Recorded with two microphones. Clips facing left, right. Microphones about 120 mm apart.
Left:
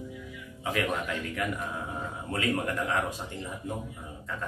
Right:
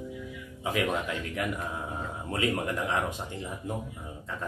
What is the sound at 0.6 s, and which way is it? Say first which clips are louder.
Music: right 1 dB; 20° right (ahead or behind).